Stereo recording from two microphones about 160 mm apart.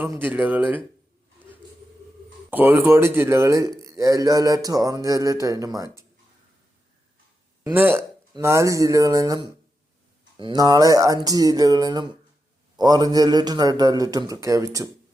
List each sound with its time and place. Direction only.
0.0 s speech: 10° right (ahead or behind)
2.5 s a man's voice: 10° right (ahead or behind)
7.7 s a man's voice: 15° right (ahead or behind)